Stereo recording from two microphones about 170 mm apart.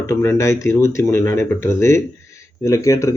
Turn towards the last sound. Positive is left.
turn(degrees=15)  # may be behind; listen again after turning